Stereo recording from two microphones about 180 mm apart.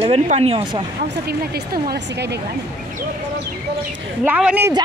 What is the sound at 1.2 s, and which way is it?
Speech, 60° right (ahead or behind).